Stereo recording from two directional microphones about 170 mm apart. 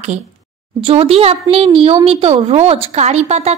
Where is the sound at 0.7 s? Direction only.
35° right (ahead or behind).